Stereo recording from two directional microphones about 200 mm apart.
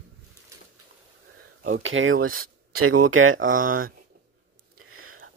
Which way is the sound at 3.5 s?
45° right (ahead or behind).